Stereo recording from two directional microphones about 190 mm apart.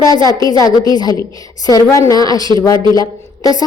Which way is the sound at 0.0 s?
20° left (ahead or behind).